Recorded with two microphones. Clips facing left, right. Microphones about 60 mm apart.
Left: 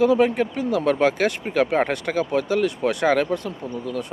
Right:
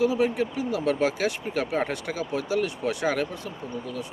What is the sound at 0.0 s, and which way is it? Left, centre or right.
Speech, left.